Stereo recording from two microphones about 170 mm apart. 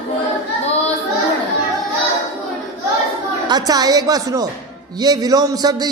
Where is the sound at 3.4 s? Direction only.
25° right (ahead or behind).